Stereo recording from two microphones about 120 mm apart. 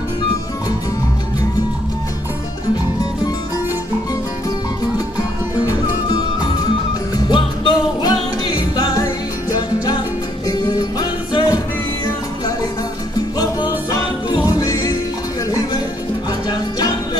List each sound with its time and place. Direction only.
5.7 s music: 30° left (ahead or behind)
13.4 s music: 35° left (ahead or behind)
16.4 s music: 35° left (ahead or behind)